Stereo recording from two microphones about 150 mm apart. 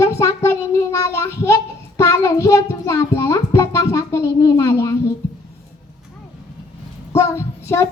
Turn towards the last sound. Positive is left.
turn(degrees=20)  # may be behind; listen again after turning